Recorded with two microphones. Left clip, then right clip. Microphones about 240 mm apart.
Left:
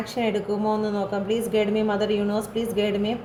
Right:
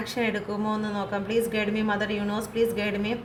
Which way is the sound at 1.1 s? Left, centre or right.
Right.